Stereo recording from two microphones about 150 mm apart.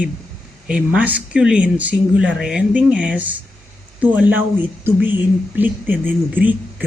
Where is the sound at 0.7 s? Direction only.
10° right (ahead or behind).